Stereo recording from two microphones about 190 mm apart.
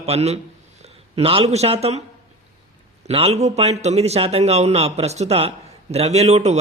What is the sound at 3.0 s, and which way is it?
Speech, 30° right (ahead or behind).